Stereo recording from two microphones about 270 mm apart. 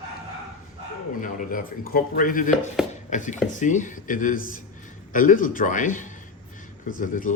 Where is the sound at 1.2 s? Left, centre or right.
Left.